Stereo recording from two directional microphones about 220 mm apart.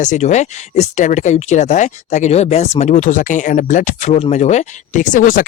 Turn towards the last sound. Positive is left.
turn(degrees=40)  # may be behind; listen again after turning